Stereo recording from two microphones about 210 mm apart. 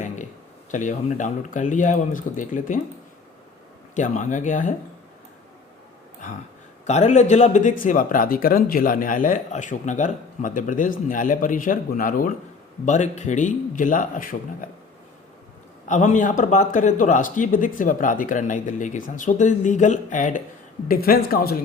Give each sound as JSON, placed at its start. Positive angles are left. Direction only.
{"t": 0.7, "sound": "a man's voice", "side_deg": 35}
{"t": 3.9, "sound": "a man's voice", "side_deg": 35}
{"t": 6.8, "sound": "a man's voice", "side_deg": 35}
{"t": 15.9, "sound": "a man's voice", "side_deg": 35}